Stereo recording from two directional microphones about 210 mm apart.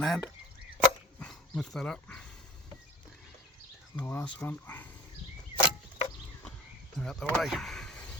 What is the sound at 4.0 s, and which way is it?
Speech, 5° left (ahead or behind).